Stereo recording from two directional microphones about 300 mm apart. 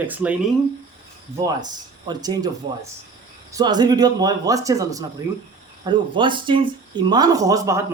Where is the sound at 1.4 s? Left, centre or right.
Centre.